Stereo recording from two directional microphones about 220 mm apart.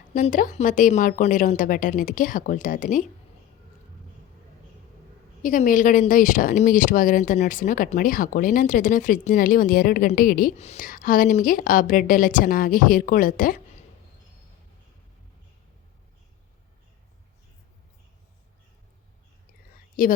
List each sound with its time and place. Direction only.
0.1 s speech: 35° left (ahead or behind)
5.4 s speech: 35° left (ahead or behind)
20.0 s a woman's voice: 40° left (ahead or behind)